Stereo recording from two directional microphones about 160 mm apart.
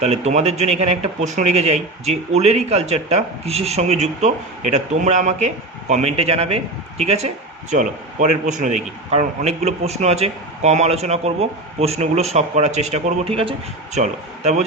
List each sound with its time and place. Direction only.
0.0 s a man's voice: 45° right (ahead or behind)
14.0 s a man's voice: 45° right (ahead or behind)